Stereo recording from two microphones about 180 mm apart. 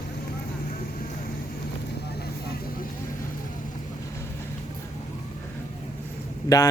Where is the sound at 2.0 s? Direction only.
60° left (ahead or behind).